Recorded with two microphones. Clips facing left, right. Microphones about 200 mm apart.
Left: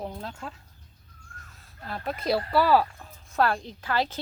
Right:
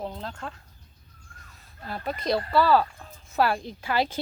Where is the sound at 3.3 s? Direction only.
5° right (ahead or behind).